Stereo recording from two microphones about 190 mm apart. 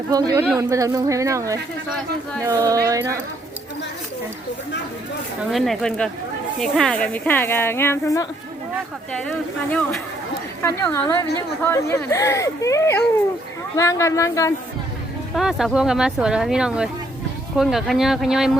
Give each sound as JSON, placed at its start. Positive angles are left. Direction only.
{"t": 0.1, "sound": "speech", "side_deg": -20}
{"t": 5.5, "sound": "speech", "side_deg": 0}
{"t": 10.6, "sound": "speech", "side_deg": 15}
{"t": 15.4, "sound": "speech", "side_deg": 0}